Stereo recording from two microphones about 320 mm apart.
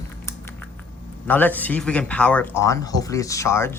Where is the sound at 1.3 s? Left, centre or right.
Centre.